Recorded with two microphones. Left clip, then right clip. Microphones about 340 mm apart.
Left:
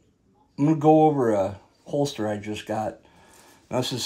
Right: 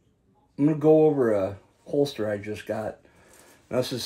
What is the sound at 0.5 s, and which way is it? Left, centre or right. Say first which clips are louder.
Speech: left 1 dB; left.